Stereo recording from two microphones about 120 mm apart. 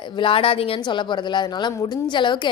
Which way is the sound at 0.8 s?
40° left (ahead or behind).